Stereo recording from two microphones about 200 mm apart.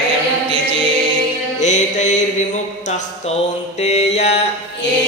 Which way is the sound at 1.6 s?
35° left (ahead or behind).